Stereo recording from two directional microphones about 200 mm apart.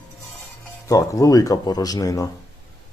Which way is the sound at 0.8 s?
15° left (ahead or behind).